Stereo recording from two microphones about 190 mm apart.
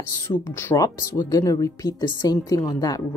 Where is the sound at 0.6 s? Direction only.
15° left (ahead or behind).